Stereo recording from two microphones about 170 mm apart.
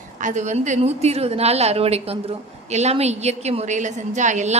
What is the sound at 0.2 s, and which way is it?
A woman's voice, 45° right (ahead or behind).